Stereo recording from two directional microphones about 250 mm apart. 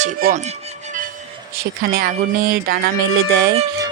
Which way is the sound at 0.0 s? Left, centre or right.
Right.